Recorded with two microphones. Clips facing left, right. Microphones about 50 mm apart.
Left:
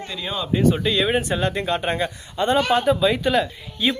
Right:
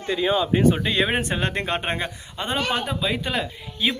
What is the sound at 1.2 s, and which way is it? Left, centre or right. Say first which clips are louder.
Speech: left 2 dB; right.